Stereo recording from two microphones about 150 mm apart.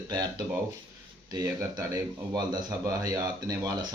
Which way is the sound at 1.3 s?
20° right (ahead or behind).